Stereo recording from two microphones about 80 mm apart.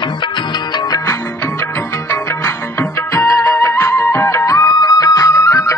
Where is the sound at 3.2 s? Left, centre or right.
Left.